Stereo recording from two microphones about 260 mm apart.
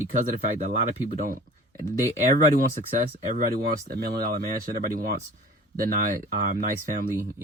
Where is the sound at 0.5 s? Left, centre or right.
Right.